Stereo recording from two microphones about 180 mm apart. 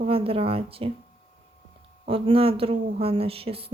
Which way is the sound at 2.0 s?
30° right (ahead or behind).